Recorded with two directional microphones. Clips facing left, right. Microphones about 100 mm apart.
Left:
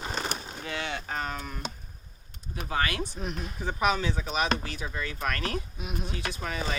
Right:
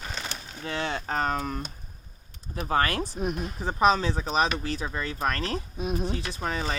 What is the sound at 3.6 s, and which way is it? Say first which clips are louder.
Speech: right 5 dB; 35° right (ahead or behind).